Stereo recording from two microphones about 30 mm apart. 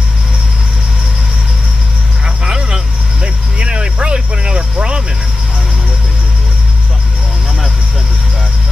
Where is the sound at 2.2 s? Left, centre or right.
Right.